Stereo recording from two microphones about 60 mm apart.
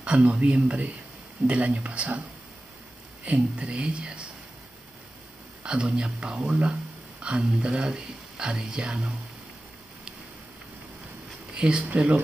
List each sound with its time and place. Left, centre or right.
0.0 s speech: centre
3.3 s speech: right
5.6 s a man's voice: centre
11.5 s a sound: centre
11.8 s speech: right